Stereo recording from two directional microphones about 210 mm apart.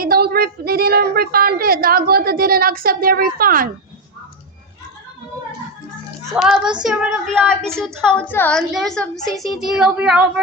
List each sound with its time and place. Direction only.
0.0 s a woman's voice: 45° right (ahead or behind)
6.3 s a woman's voice: centre (ahead or behind)